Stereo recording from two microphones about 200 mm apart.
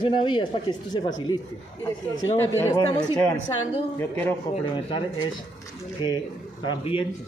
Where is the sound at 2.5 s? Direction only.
15° left (ahead or behind).